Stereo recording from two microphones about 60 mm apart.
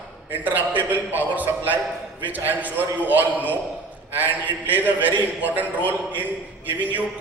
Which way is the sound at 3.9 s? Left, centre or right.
Right.